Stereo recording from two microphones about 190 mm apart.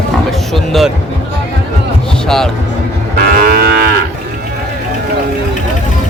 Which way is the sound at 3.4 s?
55° right (ahead or behind).